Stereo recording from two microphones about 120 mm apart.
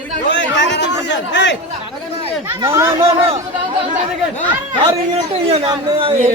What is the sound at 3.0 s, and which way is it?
Speech, 55° right (ahead or behind).